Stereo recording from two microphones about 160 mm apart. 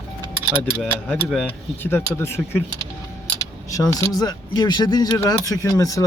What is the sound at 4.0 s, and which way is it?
Speech, 25° left (ahead or behind).